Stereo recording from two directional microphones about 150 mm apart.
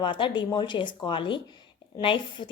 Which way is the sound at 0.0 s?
30° left (ahead or behind).